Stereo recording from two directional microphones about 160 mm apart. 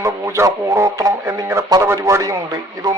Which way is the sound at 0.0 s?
15° right (ahead or behind).